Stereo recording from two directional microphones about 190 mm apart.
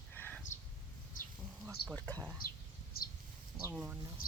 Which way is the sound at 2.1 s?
20° right (ahead or behind).